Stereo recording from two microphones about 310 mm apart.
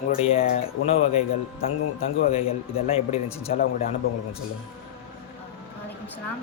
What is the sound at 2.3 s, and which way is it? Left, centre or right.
Speech, centre.